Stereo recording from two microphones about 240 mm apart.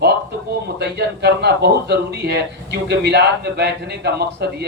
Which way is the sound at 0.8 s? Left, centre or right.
Right.